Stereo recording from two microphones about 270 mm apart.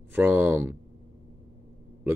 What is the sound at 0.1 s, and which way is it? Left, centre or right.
Speech, centre.